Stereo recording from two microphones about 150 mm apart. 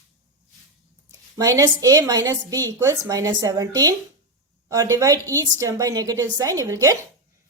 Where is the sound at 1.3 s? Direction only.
25° right (ahead or behind).